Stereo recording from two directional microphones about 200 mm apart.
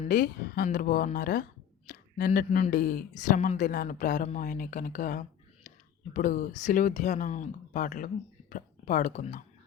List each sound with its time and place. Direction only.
0.0 s a woman's voice: 40° left (ahead or behind)